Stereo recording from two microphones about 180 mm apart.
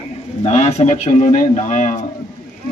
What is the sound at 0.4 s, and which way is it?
A man's voice, 40° left (ahead or behind).